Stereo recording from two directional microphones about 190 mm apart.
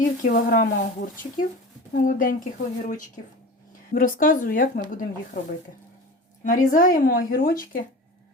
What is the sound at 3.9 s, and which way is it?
Speech, 45° left (ahead or behind).